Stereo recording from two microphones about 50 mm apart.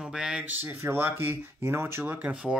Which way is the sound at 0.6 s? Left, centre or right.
Right.